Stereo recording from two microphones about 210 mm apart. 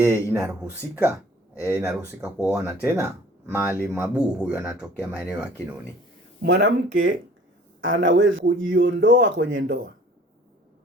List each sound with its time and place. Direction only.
0.0 s speech: 10° right (ahead or behind)
6.4 s speech: 50° right (ahead or behind)
7.8 s a man's voice: 65° right (ahead or behind)